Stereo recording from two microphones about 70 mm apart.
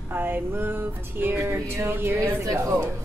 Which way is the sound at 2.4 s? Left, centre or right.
Right.